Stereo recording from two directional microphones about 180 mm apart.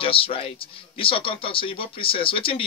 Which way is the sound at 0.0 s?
30° left (ahead or behind).